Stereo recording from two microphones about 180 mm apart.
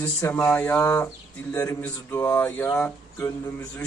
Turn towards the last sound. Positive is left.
turn(degrees=15)  # may be behind; listen again after turning